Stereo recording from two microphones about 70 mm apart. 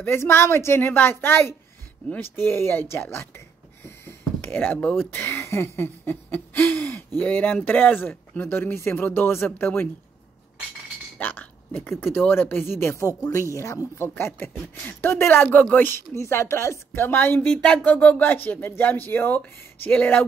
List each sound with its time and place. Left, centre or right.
0.0 s a woman's voice: left
6.3 s hoot: left
7.2 s speech: left
11.1 s chink: left
12.0 s a woman's voice: left
13.9 s a woman's voice: left
15.5 s speech: left
16.2 s a woman's voice: left
17.8 s speech: centre